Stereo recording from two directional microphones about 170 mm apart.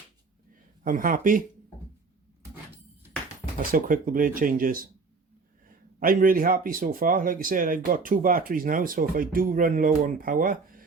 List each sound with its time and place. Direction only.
0.9 s speech: 55° right (ahead or behind)
3.6 s speech: 55° right (ahead or behind)